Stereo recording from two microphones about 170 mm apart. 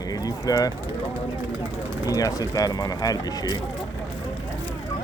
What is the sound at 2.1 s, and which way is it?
Speech, 20° left (ahead or behind).